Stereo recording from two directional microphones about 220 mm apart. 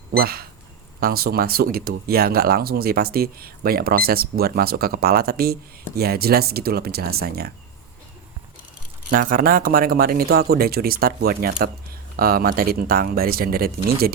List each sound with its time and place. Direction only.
0.2 s speech: 45° right (ahead or behind)
9.0 s speech: 40° right (ahead or behind)